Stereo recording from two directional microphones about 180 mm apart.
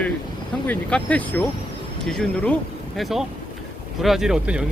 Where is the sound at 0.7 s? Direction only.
5° left (ahead or behind).